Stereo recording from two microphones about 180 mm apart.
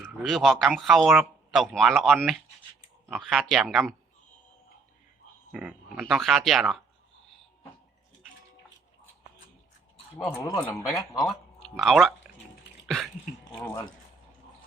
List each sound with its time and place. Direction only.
0.2 s speech: centre (ahead or behind)
5.5 s speech: 5° right (ahead or behind)
10.2 s a man's voice: 5° left (ahead or behind)
13.4 s a sound: 15° left (ahead or behind)